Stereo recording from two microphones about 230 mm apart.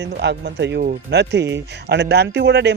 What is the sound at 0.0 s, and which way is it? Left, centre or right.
Speech, right.